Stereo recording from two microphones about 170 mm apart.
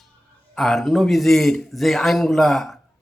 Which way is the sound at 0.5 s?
Centre (ahead or behind).